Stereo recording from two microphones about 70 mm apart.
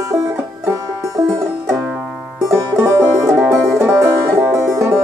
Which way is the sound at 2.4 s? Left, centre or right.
Right.